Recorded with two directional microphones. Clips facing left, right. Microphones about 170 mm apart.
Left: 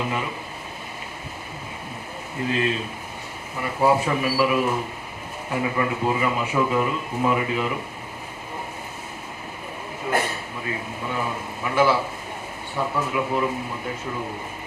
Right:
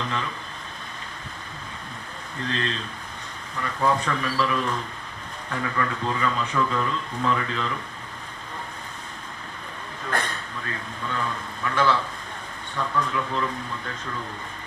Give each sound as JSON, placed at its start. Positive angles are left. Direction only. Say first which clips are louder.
{"t": 0.0, "sound": "speech", "louder": "left 3 dB", "side_deg": 10}
{"t": 2.4, "sound": "speech", "louder": "left 5 dB", "side_deg": 10}
{"t": 3.8, "sound": "speech", "louder": "left 4 dB", "side_deg": 10}
{"t": 10.0, "sound": "a man's voice", "louder": "left 5 dB", "side_deg": 5}
{"t": 13.1, "sound": "speech", "louder": "left 4 dB", "side_deg": 15}